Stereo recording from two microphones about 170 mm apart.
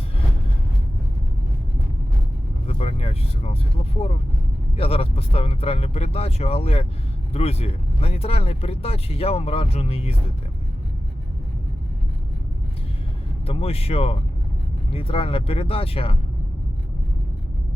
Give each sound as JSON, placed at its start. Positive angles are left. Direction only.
{"t": 2.6, "sound": "vehicle", "side_deg": 35}
{"t": 4.8, "sound": "speech", "side_deg": 35}
{"t": 13.5, "sound": "speech", "side_deg": 35}